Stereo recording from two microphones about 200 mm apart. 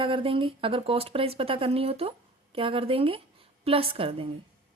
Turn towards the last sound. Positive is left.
turn(degrees=-30)  # may be behind; listen again after turning